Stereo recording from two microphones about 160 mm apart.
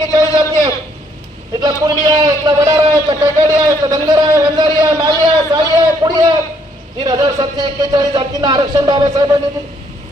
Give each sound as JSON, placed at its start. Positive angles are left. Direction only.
{"t": 0.0, "sound": "a man's voice", "side_deg": -25}